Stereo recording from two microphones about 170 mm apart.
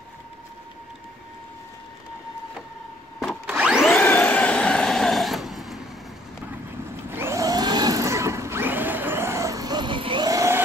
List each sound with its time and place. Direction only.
3.4 s vacuum cleaner: 5° right (ahead or behind)
3.9 s vehicle: 10° left (ahead or behind)
7.1 s a sound: 15° right (ahead or behind)